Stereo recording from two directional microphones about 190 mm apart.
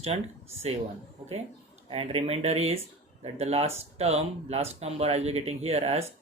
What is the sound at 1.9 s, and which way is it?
Speech, 30° right (ahead or behind).